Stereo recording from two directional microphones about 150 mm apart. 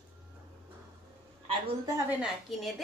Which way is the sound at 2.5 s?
Centre (ahead or behind).